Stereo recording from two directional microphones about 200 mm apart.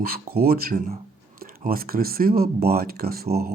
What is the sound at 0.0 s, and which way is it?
Speech, 50° right (ahead or behind).